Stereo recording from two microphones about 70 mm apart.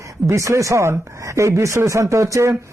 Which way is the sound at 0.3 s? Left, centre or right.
Right.